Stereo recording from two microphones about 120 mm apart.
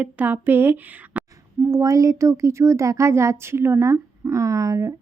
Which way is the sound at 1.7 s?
25° right (ahead or behind).